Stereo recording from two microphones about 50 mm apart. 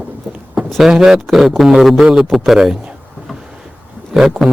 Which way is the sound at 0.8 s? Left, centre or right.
Centre.